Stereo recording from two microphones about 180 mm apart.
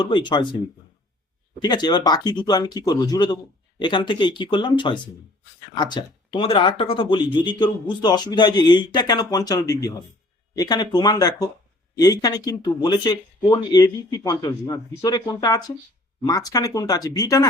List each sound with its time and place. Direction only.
0.0 s speech: 25° left (ahead or behind)
1.6 s speech: 25° left (ahead or behind)